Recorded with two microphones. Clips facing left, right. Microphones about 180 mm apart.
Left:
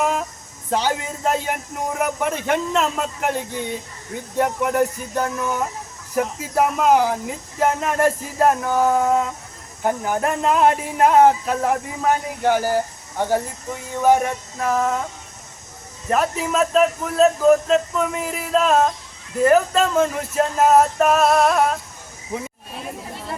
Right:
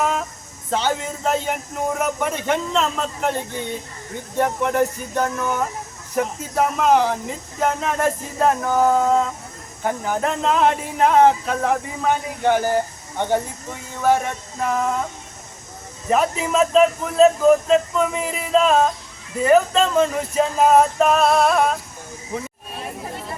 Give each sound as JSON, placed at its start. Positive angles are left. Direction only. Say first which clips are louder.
{"t": 0.7, "sound": "speech", "louder": "even", "side_deg": 10}
{"t": 14.1, "sound": "speech", "louder": "left 2 dB", "side_deg": 15}
{"t": 14.6, "sound": "speech", "louder": "left 1 dB", "side_deg": 0}
{"t": 16.0, "sound": "speech", "louder": "right 1 dB", "side_deg": 0}